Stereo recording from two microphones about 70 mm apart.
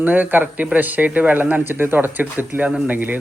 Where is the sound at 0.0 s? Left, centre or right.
Right.